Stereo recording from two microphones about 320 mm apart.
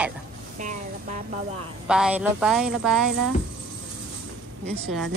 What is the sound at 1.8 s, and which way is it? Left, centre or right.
Speech, centre.